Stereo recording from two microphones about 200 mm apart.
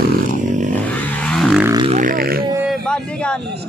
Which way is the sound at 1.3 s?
Centre (ahead or behind).